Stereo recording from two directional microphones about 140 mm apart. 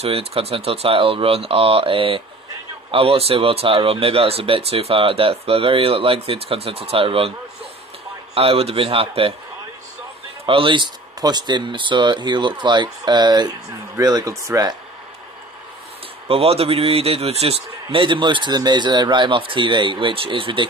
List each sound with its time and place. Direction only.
0.0 s speech: 45° right (ahead or behind)
8.4 s speech: 45° right (ahead or behind)
10.4 s speech: 40° right (ahead or behind)
16.3 s speech: 45° right (ahead or behind)